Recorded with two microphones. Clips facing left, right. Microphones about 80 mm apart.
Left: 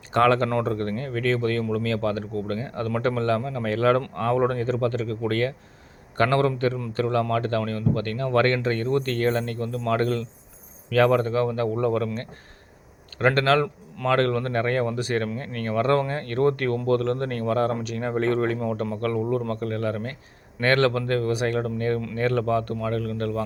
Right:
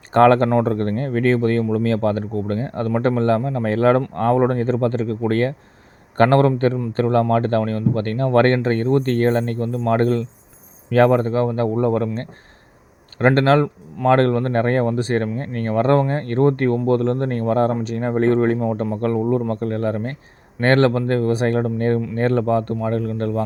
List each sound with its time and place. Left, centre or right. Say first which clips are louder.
0.1 s speech: right 7 dB; right